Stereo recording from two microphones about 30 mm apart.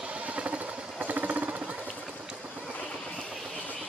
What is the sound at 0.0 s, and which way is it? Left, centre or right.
Vehicle, right.